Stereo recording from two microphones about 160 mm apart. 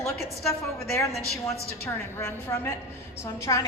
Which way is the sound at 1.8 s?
15° left (ahead or behind).